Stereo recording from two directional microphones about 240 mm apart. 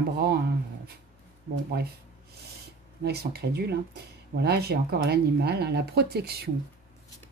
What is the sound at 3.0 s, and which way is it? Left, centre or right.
Speech, right.